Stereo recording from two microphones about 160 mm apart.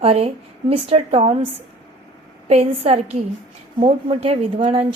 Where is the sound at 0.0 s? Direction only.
40° right (ahead or behind).